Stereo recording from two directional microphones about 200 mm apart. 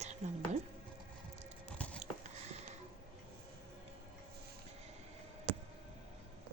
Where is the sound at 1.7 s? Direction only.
5° left (ahead or behind).